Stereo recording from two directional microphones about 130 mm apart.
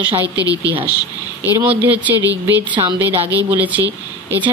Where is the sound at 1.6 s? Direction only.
10° right (ahead or behind).